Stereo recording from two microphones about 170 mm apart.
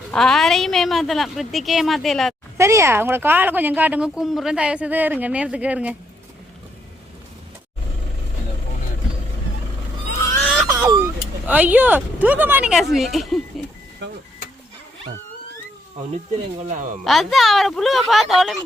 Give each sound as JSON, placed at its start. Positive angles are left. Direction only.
{"t": 0.1, "sound": "a woman's voice", "side_deg": 0}
{"t": 2.6, "sound": "speech", "side_deg": -15}
{"t": 10.7, "sound": "vehicle", "side_deg": -20}
{"t": 11.4, "sound": "a woman's voice", "side_deg": -10}
{"t": 16.6, "sound": "speech", "side_deg": -50}
{"t": 17.0, "sound": "a woman's voice", "side_deg": 0}